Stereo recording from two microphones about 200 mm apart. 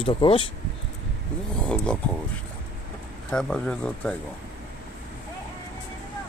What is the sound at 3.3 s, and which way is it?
Speech, 5° left (ahead or behind).